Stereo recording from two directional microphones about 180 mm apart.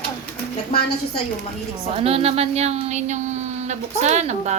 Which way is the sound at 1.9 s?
35° right (ahead or behind).